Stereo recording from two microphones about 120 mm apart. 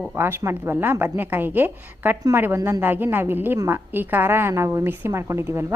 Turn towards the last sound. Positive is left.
turn(degrees=-20)  # may be behind; listen again after turning